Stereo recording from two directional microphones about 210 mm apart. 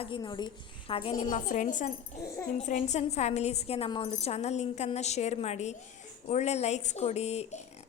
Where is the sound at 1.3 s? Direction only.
35° left (ahead or behind).